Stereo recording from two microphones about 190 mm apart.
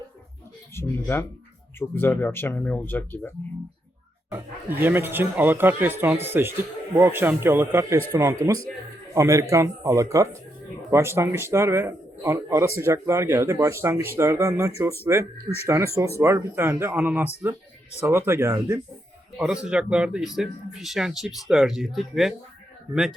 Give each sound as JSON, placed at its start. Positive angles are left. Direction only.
{"t": 0.7, "sound": "speech", "side_deg": 10}
{"t": 4.3, "sound": "speech", "side_deg": -10}
{"t": 19.6, "sound": "speech", "side_deg": -5}